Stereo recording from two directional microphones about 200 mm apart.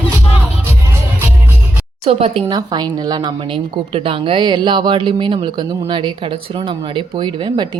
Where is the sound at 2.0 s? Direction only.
30° right (ahead or behind).